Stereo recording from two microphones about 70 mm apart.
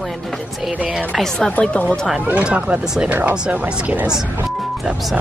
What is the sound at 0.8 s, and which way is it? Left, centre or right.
Speech, centre.